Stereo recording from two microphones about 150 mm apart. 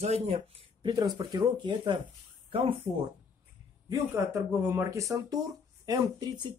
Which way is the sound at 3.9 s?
15° right (ahead or behind).